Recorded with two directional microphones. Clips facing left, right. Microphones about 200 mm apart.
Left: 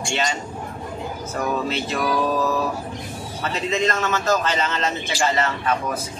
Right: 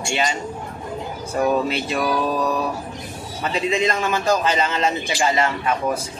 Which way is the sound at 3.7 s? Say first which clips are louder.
Even; 15° right (ahead or behind).